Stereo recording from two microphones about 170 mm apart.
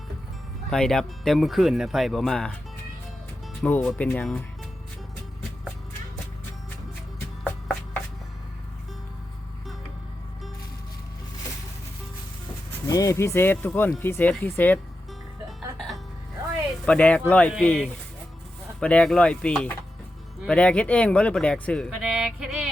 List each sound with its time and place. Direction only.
0.7 s speech: 5° left (ahead or behind)
3.6 s speech: 10° left (ahead or behind)
12.9 s speech: 20° left (ahead or behind)
16.8 s speech: 5° left (ahead or behind)